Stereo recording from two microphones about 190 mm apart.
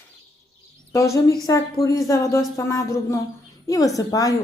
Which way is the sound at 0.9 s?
15° left (ahead or behind).